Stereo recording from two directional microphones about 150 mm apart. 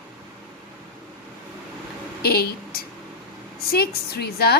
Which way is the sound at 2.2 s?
90° left.